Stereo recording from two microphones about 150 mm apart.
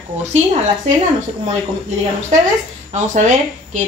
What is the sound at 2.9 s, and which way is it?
Speech, 55° right (ahead or behind).